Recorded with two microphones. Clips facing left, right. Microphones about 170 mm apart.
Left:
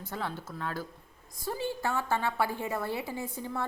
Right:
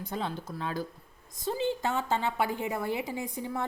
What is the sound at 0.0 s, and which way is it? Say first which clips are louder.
A woman's voice: right 2 dB; 20° right (ahead or behind).